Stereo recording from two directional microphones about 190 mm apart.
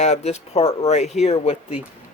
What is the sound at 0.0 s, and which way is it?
Speech, 35° left (ahead or behind).